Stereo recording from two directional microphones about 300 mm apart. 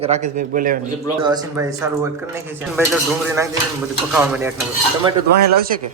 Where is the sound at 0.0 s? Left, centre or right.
Right.